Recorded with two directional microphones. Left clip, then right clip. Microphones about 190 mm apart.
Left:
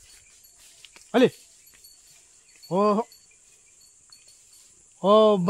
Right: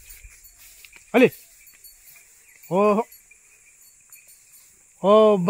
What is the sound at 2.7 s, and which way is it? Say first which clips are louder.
Speech: right 3 dB; 30° right (ahead or behind).